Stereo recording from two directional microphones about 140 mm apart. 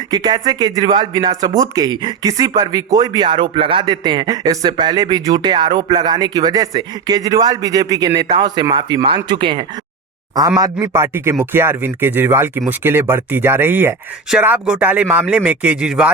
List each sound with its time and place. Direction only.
0.1 s a man's voice: 30° right (ahead or behind)
10.9 s speech: 20° right (ahead or behind)